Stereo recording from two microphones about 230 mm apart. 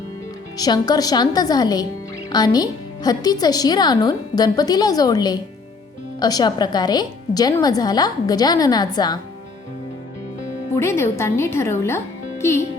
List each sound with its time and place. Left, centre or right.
0.5 s a woman's voice: centre
10.8 s a woman's voice: centre